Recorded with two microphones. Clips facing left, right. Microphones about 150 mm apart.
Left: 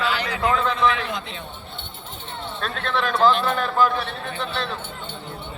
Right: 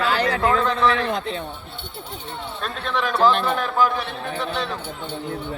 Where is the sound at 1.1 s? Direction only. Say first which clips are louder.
Right 6 dB; 40° right (ahead or behind).